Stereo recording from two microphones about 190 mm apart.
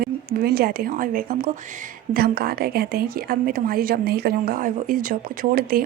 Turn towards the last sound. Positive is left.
turn(degrees=-50)  # may be behind; listen again after turning